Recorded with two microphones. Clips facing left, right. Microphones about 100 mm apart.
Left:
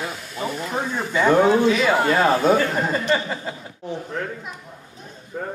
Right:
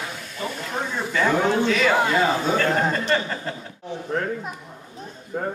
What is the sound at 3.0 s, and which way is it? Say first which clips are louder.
Speech: left 1 dB; 10° left (ahead or behind).